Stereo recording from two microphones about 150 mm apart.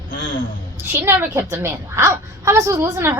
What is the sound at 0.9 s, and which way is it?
A woman's voice, 15° right (ahead or behind).